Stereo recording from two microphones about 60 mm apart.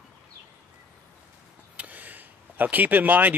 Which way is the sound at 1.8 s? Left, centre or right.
Right.